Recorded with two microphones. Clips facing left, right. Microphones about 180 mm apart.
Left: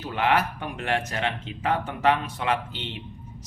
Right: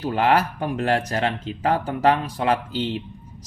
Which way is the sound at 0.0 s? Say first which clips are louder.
Right 4 dB; 40° right (ahead or behind).